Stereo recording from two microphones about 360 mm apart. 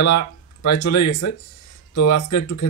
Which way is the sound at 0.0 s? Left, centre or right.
Left.